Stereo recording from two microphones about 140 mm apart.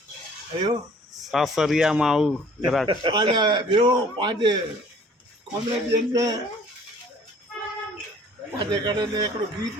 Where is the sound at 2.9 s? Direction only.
35° right (ahead or behind).